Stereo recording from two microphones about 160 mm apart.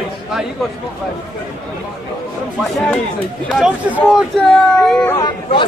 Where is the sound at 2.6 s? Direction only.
Centre (ahead or behind).